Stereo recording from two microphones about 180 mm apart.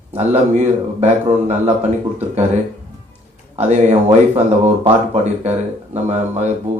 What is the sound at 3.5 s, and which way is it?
Speech, 40° right (ahead or behind).